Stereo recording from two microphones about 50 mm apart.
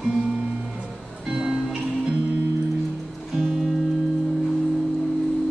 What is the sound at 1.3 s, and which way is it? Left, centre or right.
Music, centre.